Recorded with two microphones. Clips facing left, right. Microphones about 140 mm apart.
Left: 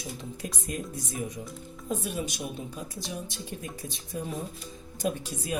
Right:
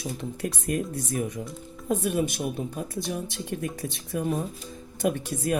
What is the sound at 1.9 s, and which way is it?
Speech, 60° right (ahead or behind).